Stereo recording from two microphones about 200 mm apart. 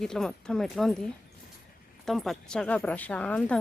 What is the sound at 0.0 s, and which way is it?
A woman's voice, 5° left (ahead or behind).